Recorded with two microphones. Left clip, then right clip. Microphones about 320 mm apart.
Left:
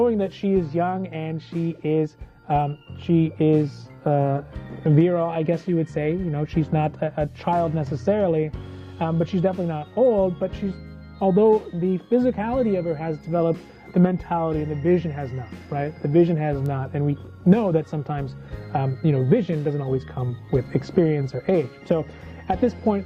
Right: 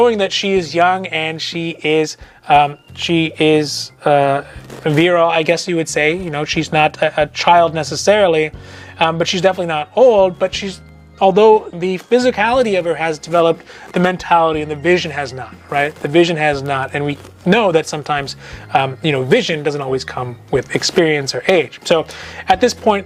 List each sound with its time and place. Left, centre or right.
0.0 s speech: centre
9.9 s speech: right
10.2 s speech: centre